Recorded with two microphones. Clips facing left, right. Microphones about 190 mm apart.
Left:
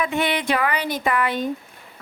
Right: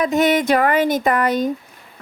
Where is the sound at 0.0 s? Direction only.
40° right (ahead or behind).